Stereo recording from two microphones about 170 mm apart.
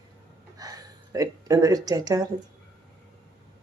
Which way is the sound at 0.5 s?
20° right (ahead or behind).